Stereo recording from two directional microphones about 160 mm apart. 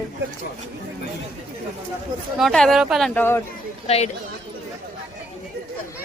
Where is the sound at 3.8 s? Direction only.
40° left (ahead or behind).